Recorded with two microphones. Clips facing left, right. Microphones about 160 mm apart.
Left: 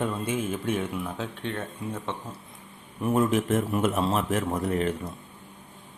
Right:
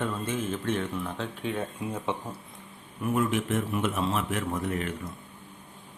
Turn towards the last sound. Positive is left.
turn(degrees=35)  # may be behind; listen again after turning